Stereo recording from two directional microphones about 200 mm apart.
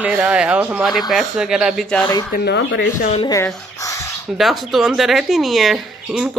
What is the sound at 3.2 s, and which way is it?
Speech, 20° left (ahead or behind).